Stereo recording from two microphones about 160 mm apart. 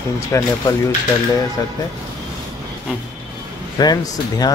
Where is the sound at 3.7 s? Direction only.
25° left (ahead or behind).